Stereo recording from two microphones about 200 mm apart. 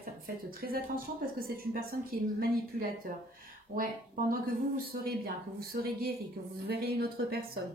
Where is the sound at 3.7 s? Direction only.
45° right (ahead or behind).